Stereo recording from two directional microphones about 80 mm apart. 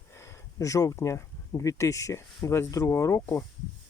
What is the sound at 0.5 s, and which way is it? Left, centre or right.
Speech, left.